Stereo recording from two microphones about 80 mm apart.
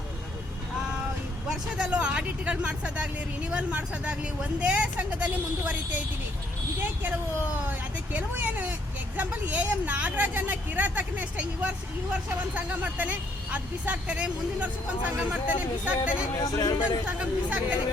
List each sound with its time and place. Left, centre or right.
1.5 s speech: centre
7.0 s speech: right
16.4 s speech: left
17.1 s speech: centre